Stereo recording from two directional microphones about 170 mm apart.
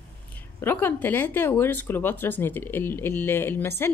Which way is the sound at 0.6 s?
15° left (ahead or behind).